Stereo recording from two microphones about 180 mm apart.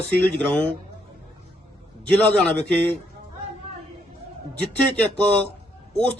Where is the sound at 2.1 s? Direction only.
10° left (ahead or behind).